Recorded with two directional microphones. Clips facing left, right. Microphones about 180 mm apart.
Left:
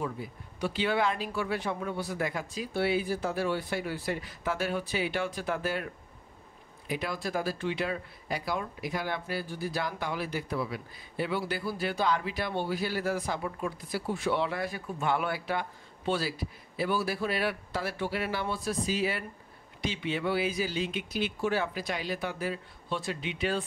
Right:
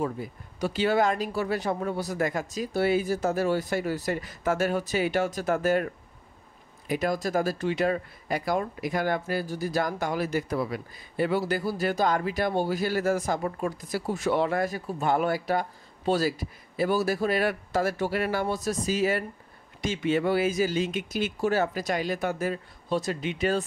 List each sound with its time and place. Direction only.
0.0 s speech: 40° right (ahead or behind)
6.9 s speech: 45° right (ahead or behind)